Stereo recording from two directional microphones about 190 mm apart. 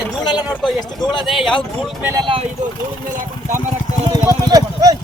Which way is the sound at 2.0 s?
15° right (ahead or behind).